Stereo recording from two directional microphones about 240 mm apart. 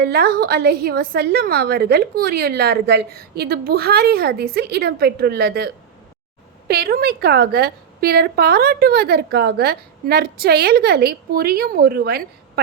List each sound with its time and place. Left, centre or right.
0.0 s a woman's voice: right